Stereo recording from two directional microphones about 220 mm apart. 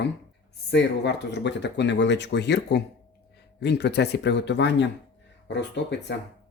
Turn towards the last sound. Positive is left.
turn(degrees=50)  # may be behind; listen again after turning